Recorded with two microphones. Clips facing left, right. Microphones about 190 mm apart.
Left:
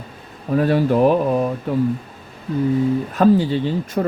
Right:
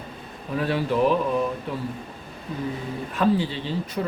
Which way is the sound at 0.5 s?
45° left (ahead or behind).